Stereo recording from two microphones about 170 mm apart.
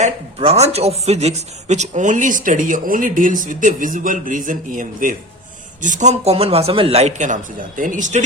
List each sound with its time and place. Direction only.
0.0 s a man's voice: 40° right (ahead or behind)